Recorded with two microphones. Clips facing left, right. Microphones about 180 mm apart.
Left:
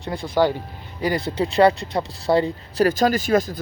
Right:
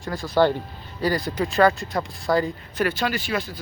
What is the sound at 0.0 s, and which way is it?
Speech, 20° left (ahead or behind).